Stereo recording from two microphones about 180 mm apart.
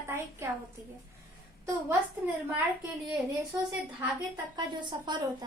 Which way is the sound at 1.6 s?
10° right (ahead or behind).